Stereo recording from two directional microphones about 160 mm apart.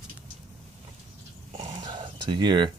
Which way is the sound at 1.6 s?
30° right (ahead or behind).